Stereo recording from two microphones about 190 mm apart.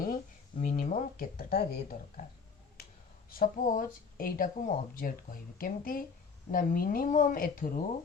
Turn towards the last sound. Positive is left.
turn(degrees=45)  # may be behind; listen again after turning